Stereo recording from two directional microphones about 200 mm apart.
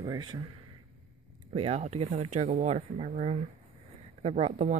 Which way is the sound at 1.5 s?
30° right (ahead or behind).